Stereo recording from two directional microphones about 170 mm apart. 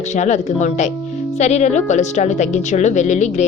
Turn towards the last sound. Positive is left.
turn(degrees=45)  # may be behind; listen again after turning